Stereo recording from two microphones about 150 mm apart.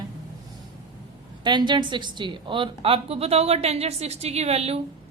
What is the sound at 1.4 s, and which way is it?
A woman's voice, 30° right (ahead or behind).